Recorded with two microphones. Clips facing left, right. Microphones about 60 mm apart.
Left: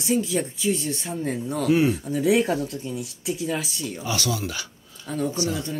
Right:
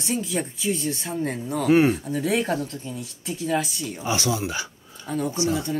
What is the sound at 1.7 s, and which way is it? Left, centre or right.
Speech, right.